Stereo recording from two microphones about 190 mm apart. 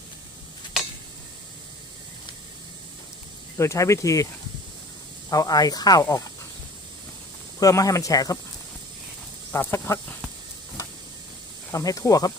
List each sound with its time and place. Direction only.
3.6 s speech: 15° left (ahead or behind)
5.3 s speech: 20° left (ahead or behind)
7.6 s speech: 20° left (ahead or behind)
9.5 s speech: 10° left (ahead or behind)
11.7 s speech: 15° left (ahead or behind)